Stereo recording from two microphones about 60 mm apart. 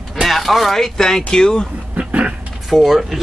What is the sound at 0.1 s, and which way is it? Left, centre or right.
Speech, centre.